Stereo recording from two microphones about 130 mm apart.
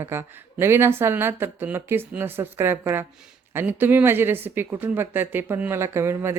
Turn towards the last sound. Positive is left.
turn(degrees=-20)  # may be behind; listen again after turning